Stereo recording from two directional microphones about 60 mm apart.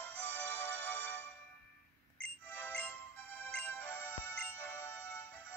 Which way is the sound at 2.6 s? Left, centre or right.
Left.